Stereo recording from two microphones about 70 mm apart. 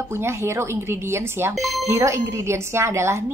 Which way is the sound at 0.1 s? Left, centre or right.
Right.